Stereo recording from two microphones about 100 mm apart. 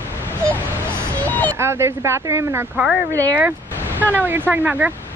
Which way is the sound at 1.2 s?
20° left (ahead or behind).